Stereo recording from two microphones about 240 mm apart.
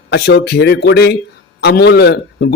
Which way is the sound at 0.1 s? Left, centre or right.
Left.